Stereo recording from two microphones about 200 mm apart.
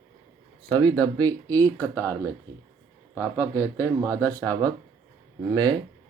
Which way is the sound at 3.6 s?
15° right (ahead or behind).